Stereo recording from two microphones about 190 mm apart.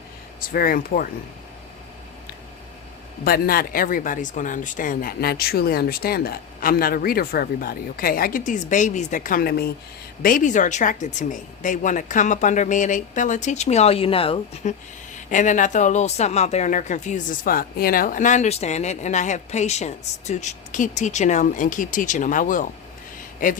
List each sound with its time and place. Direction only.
0.5 s speech: 50° left (ahead or behind)
3.2 s speech: 50° left (ahead or behind)
10.2 s a woman's voice: 40° left (ahead or behind)